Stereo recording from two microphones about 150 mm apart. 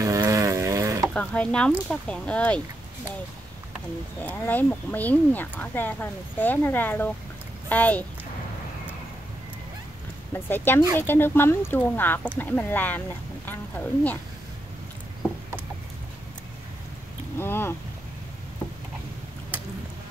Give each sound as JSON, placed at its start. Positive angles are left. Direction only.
{"t": 0.0, "sound": "a sound", "side_deg": -20}
{"t": 1.1, "sound": "speech", "side_deg": 10}
{"t": 4.2, "sound": "speech", "side_deg": 10}
{"t": 10.3, "sound": "speech", "side_deg": 15}
{"t": 17.4, "sound": "speech", "side_deg": 15}